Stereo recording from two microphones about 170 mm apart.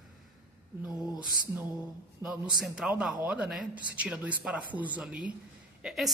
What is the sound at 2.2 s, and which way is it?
A man's voice, 5° right (ahead or behind).